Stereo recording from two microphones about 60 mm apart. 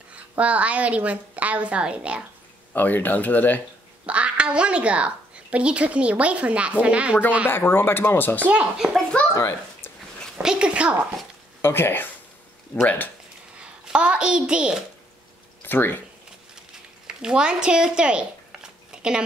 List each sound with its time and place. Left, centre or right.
0.1 s speech: right
2.7 s speech: left
4.0 s speech: right
7.4 s speech: left
8.8 s a child's voice: centre
10.4 s speech: centre
11.6 s speech: left
13.6 s a child's voice: centre
15.6 s speech: left
17.1 s speech: centre